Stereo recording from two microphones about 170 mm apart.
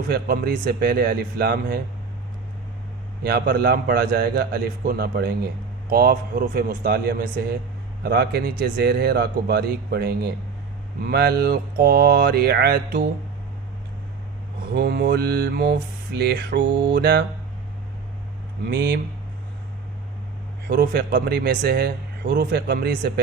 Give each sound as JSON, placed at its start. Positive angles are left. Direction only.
{"t": 0.1, "sound": "a man's voice", "side_deg": -60}
{"t": 3.2, "sound": "a man's voice", "side_deg": -70}
{"t": 14.7, "sound": "a man's voice", "side_deg": -70}
{"t": 18.7, "sound": "a man's voice", "side_deg": -70}
{"t": 20.7, "sound": "a man's voice", "side_deg": -65}